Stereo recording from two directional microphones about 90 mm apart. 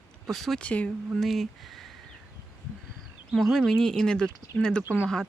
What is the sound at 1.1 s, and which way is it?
Speech, centre (ahead or behind).